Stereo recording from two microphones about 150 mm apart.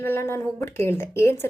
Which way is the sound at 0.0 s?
15° left (ahead or behind).